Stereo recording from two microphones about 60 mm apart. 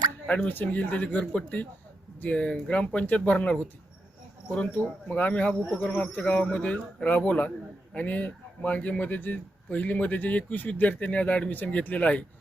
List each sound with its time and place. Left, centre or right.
0.4 s a man's voice: left
6.1 s speech: left
6.3 s a man's voice: left